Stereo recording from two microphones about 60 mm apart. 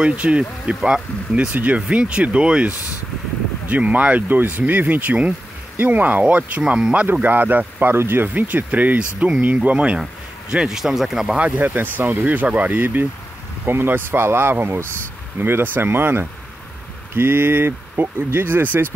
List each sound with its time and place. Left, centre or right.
0.0 s speech: right
1.5 s speech: right
1.8 s speech: centre
6.6 s speech: centre
7.1 s speech: right
8.3 s speech: right; by 11.3 s centre
11.3 s speech: right